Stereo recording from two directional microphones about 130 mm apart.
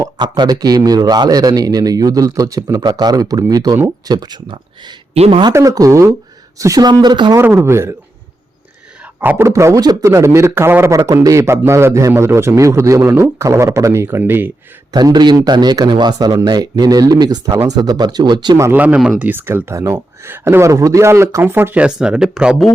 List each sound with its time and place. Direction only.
0.0 s a man's voice: 35° right (ahead or behind); by 5.4 s 50° right (ahead or behind)
5.4 s a man's voice: 30° right (ahead or behind)
7.4 s a man's voice: 20° right (ahead or behind)
9.2 s a man's voice: 15° right (ahead or behind)
14.9 s a man's voice: 35° right (ahead or behind)
18.5 s speech: 20° right (ahead or behind)